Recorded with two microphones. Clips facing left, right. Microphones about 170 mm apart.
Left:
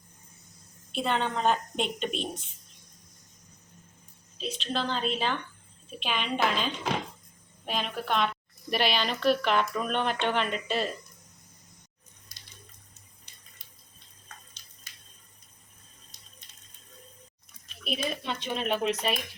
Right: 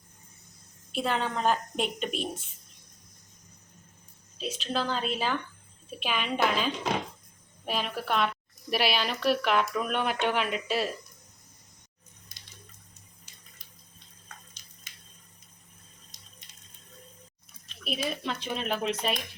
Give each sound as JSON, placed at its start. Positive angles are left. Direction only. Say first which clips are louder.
{"t": 0.9, "sound": "speech", "louder": "left 1 dB", "side_deg": -5}
{"t": 4.4, "sound": "speech", "louder": "right 1 dB", "side_deg": -5}
{"t": 14.9, "sound": "a sound", "louder": "even", "side_deg": -20}
{"t": 17.8, "sound": "speech", "louder": "even", "side_deg": 0}